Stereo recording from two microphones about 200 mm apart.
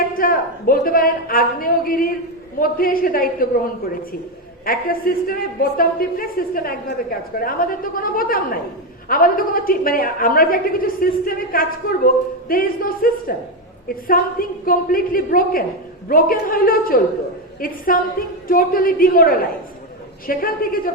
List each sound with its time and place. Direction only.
0.1 s a woman's voice: 45° left (ahead or behind)
4.6 s a woman's voice: 45° left (ahead or behind)